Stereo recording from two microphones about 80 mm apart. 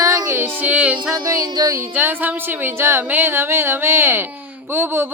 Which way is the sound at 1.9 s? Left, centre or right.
Right.